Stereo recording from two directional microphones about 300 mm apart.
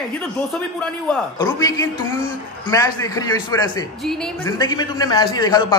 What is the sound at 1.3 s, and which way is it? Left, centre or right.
A man's voice, centre.